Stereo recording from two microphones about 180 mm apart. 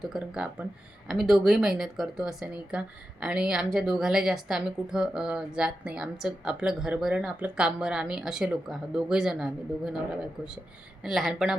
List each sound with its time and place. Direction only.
0.0 s speech: 5° right (ahead or behind)
11.0 s speech: centre (ahead or behind)